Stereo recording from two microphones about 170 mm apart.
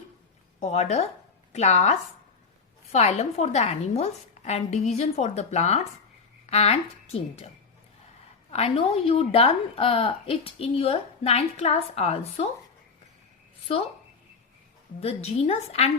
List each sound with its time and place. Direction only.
0.6 s a woman's voice: 40° left (ahead or behind)
13.7 s a woman's voice: 35° left (ahead or behind)
15.0 s a woman's voice: 35° left (ahead or behind)